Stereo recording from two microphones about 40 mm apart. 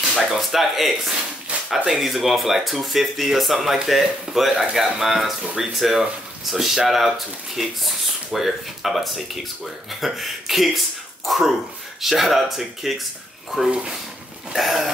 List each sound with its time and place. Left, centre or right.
0.1 s speech: centre
1.5 s a sound: right
1.9 s speech: centre
14.5 s speech: centre